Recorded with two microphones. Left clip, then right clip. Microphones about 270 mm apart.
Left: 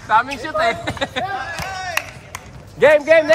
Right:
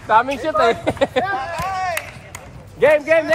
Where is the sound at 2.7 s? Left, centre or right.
Left.